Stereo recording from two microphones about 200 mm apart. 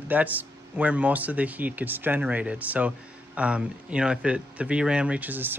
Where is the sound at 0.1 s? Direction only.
10° right (ahead or behind).